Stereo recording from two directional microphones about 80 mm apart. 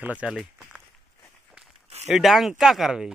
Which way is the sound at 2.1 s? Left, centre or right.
Centre.